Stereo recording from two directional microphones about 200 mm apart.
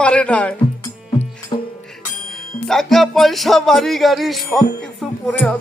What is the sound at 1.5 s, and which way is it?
Music, 25° left (ahead or behind).